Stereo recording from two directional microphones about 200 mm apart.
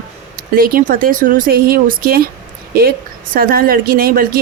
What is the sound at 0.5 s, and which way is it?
Speech, 45° right (ahead or behind).